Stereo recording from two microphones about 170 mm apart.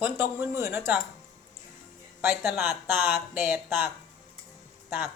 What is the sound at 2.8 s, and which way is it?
Speech, 10° right (ahead or behind).